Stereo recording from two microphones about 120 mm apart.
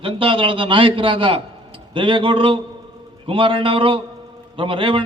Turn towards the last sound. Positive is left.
turn(degrees=-45)  # may be behind; listen again after turning